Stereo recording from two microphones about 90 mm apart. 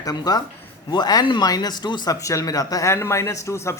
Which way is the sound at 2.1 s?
40° left (ahead or behind).